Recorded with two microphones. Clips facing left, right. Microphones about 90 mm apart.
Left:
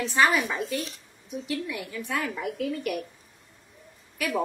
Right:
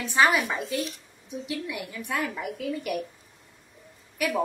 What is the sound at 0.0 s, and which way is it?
A woman's voice, 15° right (ahead or behind).